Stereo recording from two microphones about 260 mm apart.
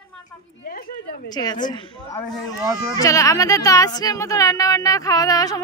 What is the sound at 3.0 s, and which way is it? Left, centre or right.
Speech, centre.